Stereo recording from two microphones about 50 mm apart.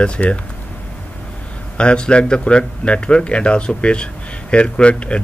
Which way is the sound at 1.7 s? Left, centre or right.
Centre.